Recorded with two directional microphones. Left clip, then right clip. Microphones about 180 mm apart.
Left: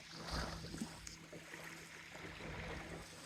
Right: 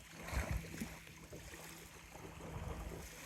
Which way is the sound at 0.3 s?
20° right (ahead or behind).